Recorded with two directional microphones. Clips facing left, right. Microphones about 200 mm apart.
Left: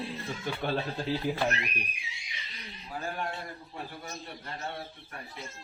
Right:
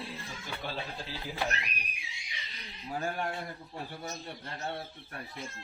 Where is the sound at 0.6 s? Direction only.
55° left (ahead or behind).